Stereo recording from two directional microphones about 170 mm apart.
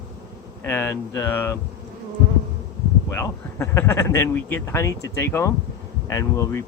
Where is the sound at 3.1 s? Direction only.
15° left (ahead or behind).